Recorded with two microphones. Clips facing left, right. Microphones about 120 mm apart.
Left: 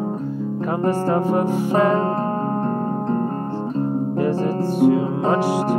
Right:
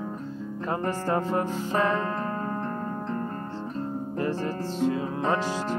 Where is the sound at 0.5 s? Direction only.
20° left (ahead or behind); by 3.5 s 35° left (ahead or behind).